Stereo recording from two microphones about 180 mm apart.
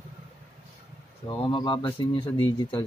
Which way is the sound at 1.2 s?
25° left (ahead or behind).